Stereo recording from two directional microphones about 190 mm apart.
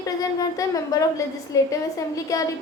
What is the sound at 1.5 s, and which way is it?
Speech, 15° left (ahead or behind).